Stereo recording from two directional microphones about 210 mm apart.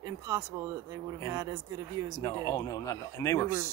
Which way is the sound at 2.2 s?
15° left (ahead or behind).